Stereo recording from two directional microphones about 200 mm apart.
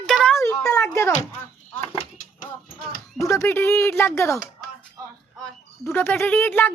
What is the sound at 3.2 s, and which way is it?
Speech, 15° left (ahead or behind).